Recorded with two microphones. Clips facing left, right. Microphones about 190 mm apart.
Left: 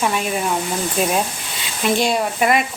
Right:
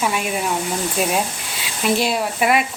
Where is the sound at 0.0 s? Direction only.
5° right (ahead or behind).